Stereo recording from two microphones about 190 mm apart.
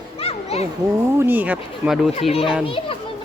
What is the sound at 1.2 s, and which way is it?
Speech, 10° right (ahead or behind).